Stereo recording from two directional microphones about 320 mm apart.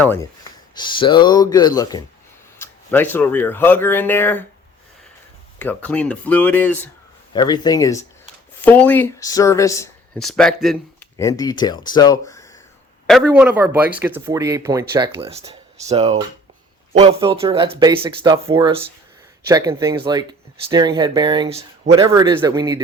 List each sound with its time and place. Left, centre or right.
0.0 s speech: centre
5.5 s speech: centre
13.1 s speech: centre